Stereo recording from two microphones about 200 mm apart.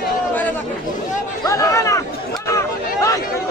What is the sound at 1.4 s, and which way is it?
Chatter, 15° left (ahead or behind).